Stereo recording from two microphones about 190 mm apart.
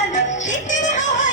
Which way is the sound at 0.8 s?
40° left (ahead or behind).